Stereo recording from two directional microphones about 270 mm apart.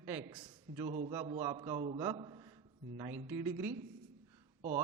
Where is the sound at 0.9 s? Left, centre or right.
Right.